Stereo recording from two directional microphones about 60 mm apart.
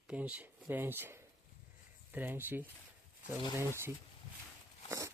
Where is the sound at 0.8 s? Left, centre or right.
Right.